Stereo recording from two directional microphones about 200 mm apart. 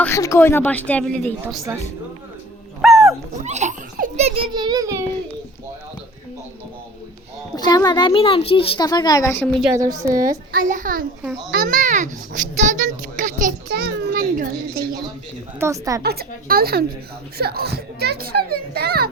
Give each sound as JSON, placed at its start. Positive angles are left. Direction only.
{"t": 0.0, "sound": "a woman's voice", "side_deg": 15}
{"t": 2.8, "sound": "dog", "side_deg": 0}
{"t": 3.4, "sound": "a child's voice", "side_deg": -35}
{"t": 7.5, "sound": "speech", "side_deg": 20}
{"t": 9.7, "sound": "a woman's voice", "side_deg": -15}
{"t": 10.5, "sound": "a child's voice", "side_deg": -40}
{"t": 13.7, "sound": "a sound", "side_deg": -55}
{"t": 15.6, "sound": "a woman's voice", "side_deg": -15}
{"t": 16.0, "sound": "a child's voice", "side_deg": -50}